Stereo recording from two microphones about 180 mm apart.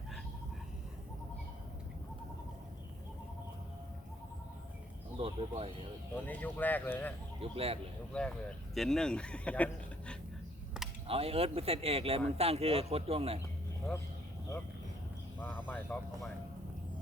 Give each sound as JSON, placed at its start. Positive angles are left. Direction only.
{"t": 5.1, "sound": "speech", "side_deg": -30}
{"t": 6.2, "sound": "speech", "side_deg": 10}
{"t": 7.5, "sound": "speech", "side_deg": -35}
{"t": 8.1, "sound": "speech", "side_deg": 5}
{"t": 10.8, "sound": "a sound", "side_deg": -5}
{"t": 11.1, "sound": "speech", "side_deg": -35}
{"t": 15.4, "sound": "speech", "side_deg": 10}